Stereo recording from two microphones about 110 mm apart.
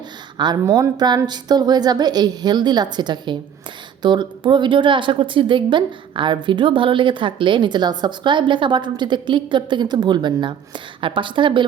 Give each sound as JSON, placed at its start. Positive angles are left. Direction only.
{"t": 0.3, "sound": "a woman's voice", "side_deg": -40}